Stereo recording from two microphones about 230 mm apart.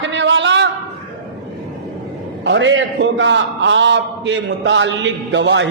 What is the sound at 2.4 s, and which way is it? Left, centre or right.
A man's voice, right.